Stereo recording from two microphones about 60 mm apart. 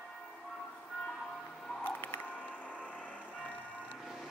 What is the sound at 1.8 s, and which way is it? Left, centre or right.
Music, left.